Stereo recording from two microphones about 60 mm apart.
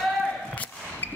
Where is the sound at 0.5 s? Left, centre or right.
Left.